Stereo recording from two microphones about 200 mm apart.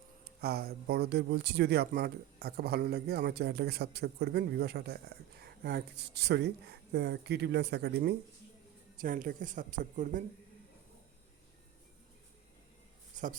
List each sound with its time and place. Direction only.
0.4 s speech: 50° right (ahead or behind)
9.0 s speech: 45° right (ahead or behind)
13.2 s a sound: 40° right (ahead or behind)